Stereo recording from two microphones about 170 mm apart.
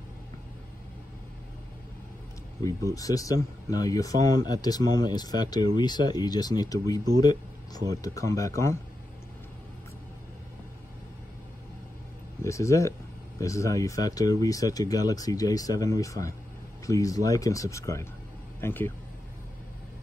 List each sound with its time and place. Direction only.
2.6 s speech: 20° left (ahead or behind)
12.4 s speech: 15° left (ahead or behind)